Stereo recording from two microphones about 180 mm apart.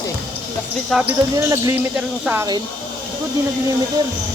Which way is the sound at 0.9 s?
5° right (ahead or behind).